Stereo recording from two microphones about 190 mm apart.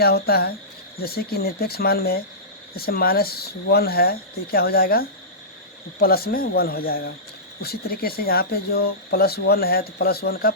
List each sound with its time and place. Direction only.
0.0 s speech: 55° left (ahead or behind)